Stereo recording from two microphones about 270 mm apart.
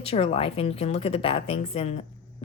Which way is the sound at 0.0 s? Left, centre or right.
Left.